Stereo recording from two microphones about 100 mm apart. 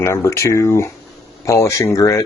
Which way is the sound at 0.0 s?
30° left (ahead or behind).